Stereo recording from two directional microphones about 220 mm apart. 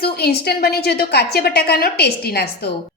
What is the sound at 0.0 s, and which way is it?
A woman's voice, 45° left (ahead or behind).